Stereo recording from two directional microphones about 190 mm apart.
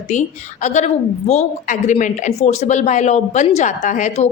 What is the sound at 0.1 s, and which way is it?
A woman's voice, 40° left (ahead or behind).